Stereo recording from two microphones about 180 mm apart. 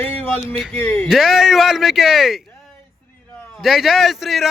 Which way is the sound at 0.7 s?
15° left (ahead or behind).